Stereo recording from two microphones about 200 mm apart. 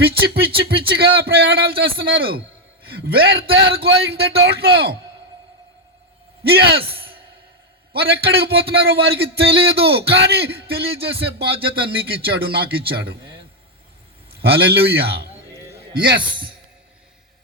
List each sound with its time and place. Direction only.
0.4 s a man's voice: 50° right (ahead or behind)
6.4 s a man's voice: 55° right (ahead or behind)
7.9 s a man's voice: 55° right (ahead or behind)
14.4 s a man's voice: 55° right (ahead or behind)